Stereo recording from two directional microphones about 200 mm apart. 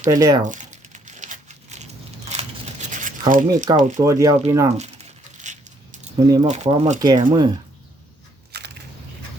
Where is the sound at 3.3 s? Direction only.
40° right (ahead or behind).